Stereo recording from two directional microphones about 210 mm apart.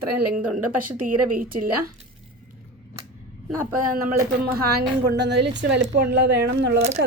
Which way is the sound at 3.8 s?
40° right (ahead or behind).